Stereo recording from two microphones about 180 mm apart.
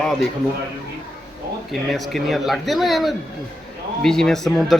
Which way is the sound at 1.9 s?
Centre (ahead or behind).